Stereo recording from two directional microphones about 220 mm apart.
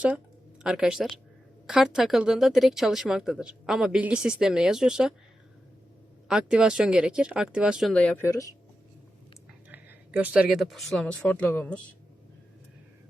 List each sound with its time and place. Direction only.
0.6 s speech: 5° right (ahead or behind)
6.2 s speech: 5° right (ahead or behind); by 8.5 s 15° left (ahead or behind)
9.6 s speech: 5° right (ahead or behind); by 11.8 s 10° left (ahead or behind)